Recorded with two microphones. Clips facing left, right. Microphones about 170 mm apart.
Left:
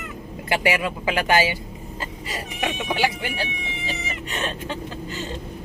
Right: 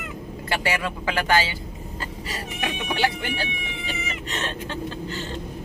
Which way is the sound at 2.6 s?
10° left (ahead or behind).